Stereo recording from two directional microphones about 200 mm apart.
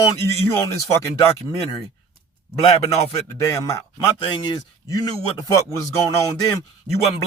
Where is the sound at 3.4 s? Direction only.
15° left (ahead or behind).